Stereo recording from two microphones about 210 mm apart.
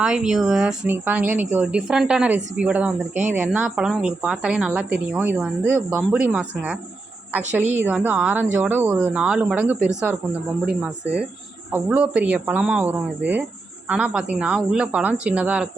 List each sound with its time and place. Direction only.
0.0 s speech: 5° right (ahead or behind)
11.7 s speech: 10° right (ahead or behind)